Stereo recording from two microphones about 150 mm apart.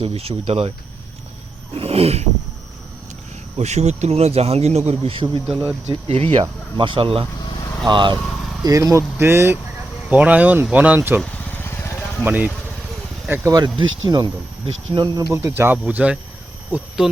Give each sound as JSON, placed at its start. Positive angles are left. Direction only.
{"t": 0.0, "sound": "speech", "side_deg": -40}
{"t": 1.7, "sound": "speech", "side_deg": -40}
{"t": 3.6, "sound": "speech", "side_deg": -50}
{"t": 11.2, "sound": "vehicle", "side_deg": 15}
{"t": 12.2, "sound": "speech", "side_deg": -10}
{"t": 13.5, "sound": "speech", "side_deg": -30}